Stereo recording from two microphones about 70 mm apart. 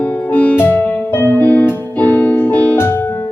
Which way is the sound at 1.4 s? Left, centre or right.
Left.